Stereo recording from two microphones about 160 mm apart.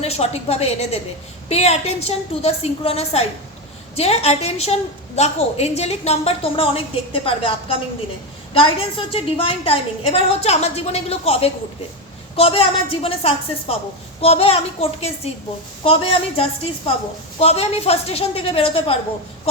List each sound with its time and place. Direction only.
0.0 s a woman's voice: 40° left (ahead or behind)